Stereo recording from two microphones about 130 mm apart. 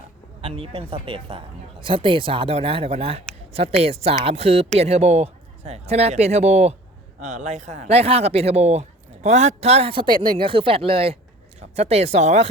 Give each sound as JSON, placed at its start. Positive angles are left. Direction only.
{"t": 0.4, "sound": "speech", "side_deg": -45}